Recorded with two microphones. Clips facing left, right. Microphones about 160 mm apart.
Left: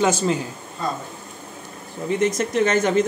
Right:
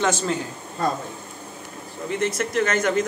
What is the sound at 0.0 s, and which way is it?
Speech, 10° left (ahead or behind).